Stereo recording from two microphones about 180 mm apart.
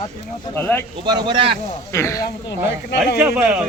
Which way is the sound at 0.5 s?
10° left (ahead or behind).